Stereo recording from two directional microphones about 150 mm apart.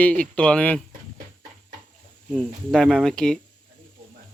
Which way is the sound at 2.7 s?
Centre (ahead or behind).